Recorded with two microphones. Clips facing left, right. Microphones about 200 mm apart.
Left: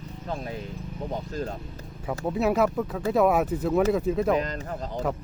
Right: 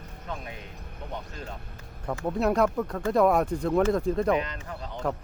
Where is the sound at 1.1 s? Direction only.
40° left (ahead or behind).